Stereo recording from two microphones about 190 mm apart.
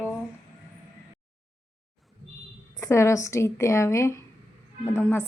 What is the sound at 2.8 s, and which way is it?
A woman's voice, 15° left (ahead or behind).